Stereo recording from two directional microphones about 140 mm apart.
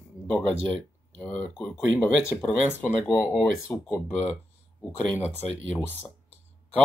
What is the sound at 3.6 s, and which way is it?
Speech, 15° left (ahead or behind).